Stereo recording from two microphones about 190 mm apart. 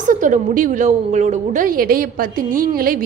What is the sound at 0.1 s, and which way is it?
A woman's voice, 45° right (ahead or behind).